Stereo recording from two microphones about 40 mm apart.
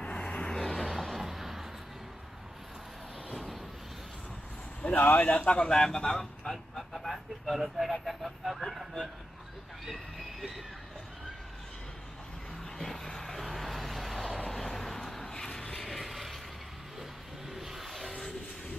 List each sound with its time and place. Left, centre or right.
0.0 s vehicle: left
0.5 s vehicle: centre
4.8 s a man's voice: left; by 8.8 s centre
12.7 s vehicle: centre
17.5 s vehicle: centre